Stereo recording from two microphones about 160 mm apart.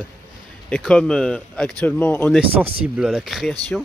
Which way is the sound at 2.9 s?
5° right (ahead or behind).